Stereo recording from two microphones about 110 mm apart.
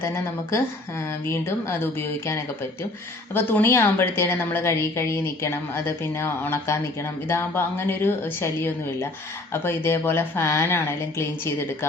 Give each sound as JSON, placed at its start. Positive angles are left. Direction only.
{"t": 0.0, "sound": "a woman's voice", "side_deg": 25}